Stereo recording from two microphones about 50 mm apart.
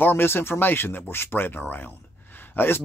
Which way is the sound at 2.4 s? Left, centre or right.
Left.